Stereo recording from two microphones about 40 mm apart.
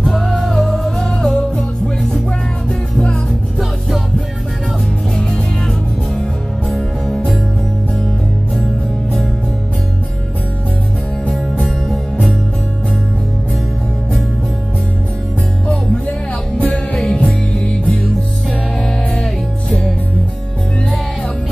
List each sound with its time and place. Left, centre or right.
0.0 s music: centre
16.5 s music: left
17.1 s music: centre